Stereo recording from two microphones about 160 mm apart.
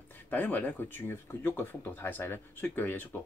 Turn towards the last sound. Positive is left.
turn(degrees=10)  # may be behind; listen again after turning